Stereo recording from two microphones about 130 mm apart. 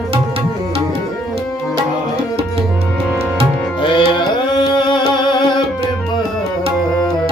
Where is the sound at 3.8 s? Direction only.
35° left (ahead or behind).